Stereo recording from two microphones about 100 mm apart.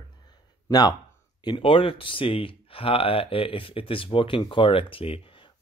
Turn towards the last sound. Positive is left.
turn(degrees=70)  # may be behind; listen again after turning